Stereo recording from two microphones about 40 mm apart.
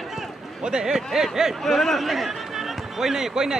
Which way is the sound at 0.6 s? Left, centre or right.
Centre.